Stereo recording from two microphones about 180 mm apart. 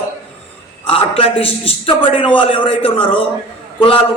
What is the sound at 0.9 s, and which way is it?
A man's voice, 30° left (ahead or behind).